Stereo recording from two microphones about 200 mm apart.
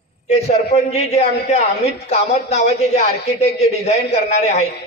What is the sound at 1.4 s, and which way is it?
A man's voice, 35° left (ahead or behind).